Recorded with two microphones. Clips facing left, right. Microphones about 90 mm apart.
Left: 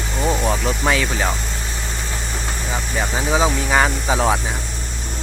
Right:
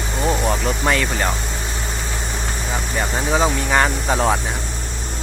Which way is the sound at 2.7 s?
Centre (ahead or behind).